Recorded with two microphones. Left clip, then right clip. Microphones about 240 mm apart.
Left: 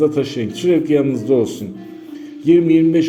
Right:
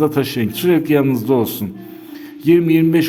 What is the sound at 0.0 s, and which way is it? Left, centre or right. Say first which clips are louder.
A man's voice: even; right.